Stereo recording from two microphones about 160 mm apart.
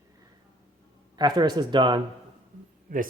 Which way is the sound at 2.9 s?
55° right (ahead or behind).